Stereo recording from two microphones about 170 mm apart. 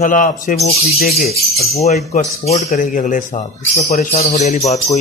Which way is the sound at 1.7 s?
40° left (ahead or behind).